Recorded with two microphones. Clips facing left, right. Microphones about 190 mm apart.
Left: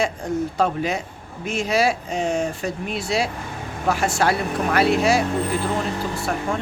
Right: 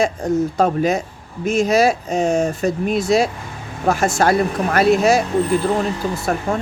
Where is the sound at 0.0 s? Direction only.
40° right (ahead or behind).